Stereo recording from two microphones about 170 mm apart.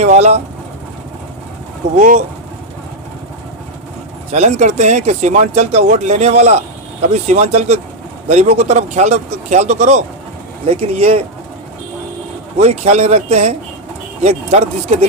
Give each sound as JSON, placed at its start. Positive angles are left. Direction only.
{"t": 0.0, "sound": "speech", "side_deg": -40}
{"t": 2.0, "sound": "speech", "side_deg": -50}
{"t": 4.3, "sound": "speech", "side_deg": -40}
{"t": 12.5, "sound": "speech", "side_deg": -40}